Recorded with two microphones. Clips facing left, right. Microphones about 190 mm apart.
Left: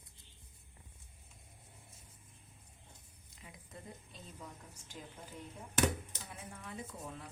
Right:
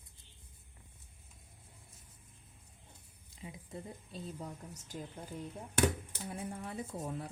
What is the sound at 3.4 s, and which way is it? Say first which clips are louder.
Speech: right 7 dB; 30° right (ahead or behind).